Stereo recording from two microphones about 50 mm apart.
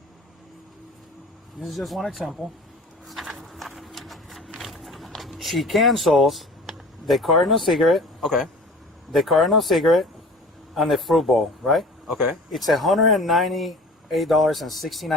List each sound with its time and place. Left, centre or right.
1.6 s speech: centre
3.1 s a sound: centre
9.1 s speech: centre